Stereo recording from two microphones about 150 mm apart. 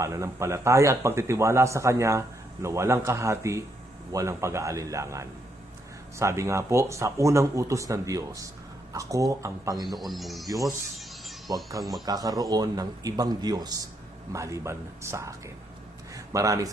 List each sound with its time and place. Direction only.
0.0 s speech: 20° right (ahead or behind)
9.9 s speech: centre (ahead or behind)
10.4 s speech: 25° right (ahead or behind)